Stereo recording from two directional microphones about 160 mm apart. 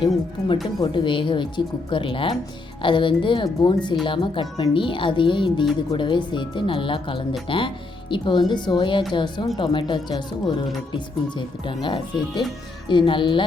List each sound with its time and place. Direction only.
0.0 s speech: 30° left (ahead or behind)